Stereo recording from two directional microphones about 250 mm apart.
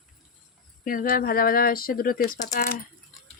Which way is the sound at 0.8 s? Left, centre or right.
Left.